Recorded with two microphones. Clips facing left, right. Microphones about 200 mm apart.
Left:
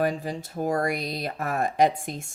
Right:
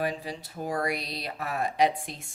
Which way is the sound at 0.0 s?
45° left (ahead or behind).